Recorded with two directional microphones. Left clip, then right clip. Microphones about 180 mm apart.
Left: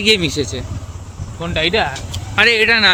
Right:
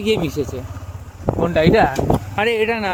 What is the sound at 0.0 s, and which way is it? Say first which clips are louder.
Speech: left 5 dB; 10° right (ahead or behind).